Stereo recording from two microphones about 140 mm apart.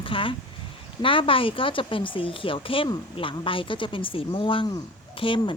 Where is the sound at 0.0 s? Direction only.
40° left (ahead or behind).